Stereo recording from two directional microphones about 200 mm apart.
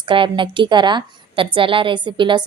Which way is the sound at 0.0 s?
25° right (ahead or behind).